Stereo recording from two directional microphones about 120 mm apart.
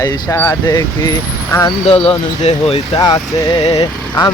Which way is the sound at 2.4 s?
55° left (ahead or behind).